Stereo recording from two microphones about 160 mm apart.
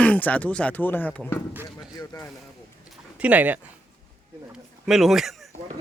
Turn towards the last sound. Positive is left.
turn(degrees=0)  # may be behind; listen again after turning